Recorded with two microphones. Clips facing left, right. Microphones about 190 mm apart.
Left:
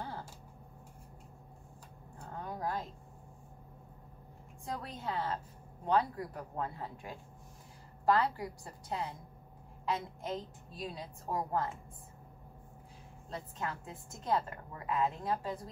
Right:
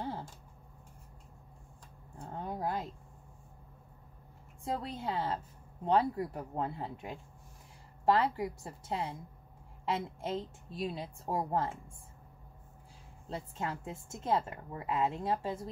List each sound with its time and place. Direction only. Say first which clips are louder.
2.2 s a sound: right 2 dB; 25° right (ahead or behind)
4.6 s a woman's voice: right 4 dB; 30° right (ahead or behind)
13.3 s a woman's voice: right 2 dB; 25° right (ahead or behind)